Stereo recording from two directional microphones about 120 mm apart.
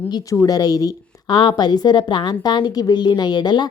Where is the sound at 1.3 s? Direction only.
40° left (ahead or behind).